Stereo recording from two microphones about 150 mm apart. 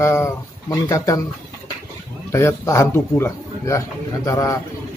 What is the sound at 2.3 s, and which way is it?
A man's voice, 15° left (ahead or behind).